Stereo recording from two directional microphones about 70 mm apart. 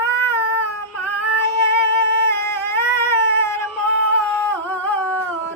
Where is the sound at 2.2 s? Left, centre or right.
Left.